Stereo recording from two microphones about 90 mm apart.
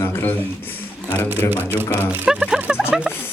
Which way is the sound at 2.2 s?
10° right (ahead or behind).